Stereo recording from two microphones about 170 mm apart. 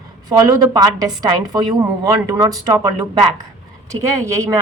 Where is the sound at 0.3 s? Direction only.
20° right (ahead or behind).